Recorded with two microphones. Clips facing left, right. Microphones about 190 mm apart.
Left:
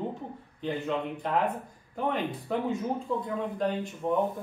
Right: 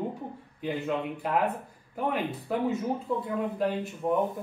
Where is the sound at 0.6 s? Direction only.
10° right (ahead or behind).